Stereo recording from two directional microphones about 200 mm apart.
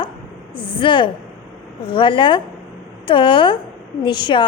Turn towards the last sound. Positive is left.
turn(degrees=25)  # may be behind; listen again after turning